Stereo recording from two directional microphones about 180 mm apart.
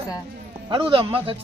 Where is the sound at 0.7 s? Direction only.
30° right (ahead or behind).